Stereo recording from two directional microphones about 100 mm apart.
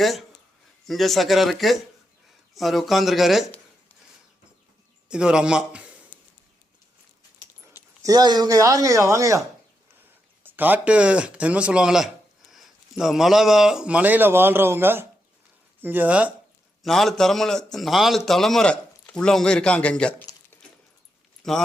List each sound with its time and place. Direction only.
0.0 s speech: centre (ahead or behind)
5.0 s a man's voice: 10° right (ahead or behind)
8.0 s speech: 40° right (ahead or behind)
10.4 s speech: 20° right (ahead or behind)
16.8 s speech: centre (ahead or behind)
21.4 s speech: 5° left (ahead or behind)